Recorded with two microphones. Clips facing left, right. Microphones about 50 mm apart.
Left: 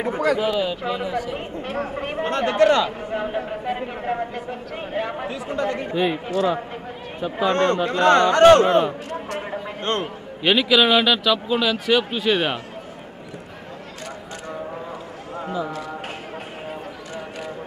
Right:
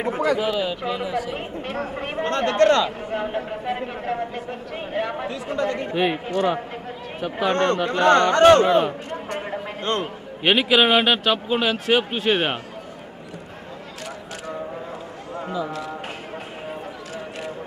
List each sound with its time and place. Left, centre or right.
0.4 s a man's voice: centre
3.1 s a man's voice: centre
6.0 s a man's voice: right
7.4 s a man's voice: centre
10.4 s a man's voice: centre
11.2 s a man's voice: right
11.9 s a man's voice: right
15.3 s a sound: centre